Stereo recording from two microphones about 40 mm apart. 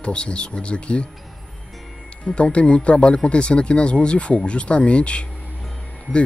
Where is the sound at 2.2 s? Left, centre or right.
Left.